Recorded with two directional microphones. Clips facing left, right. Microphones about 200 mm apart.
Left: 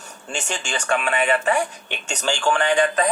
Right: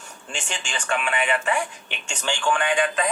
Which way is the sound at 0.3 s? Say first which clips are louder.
Left 5 dB; 40° left (ahead or behind).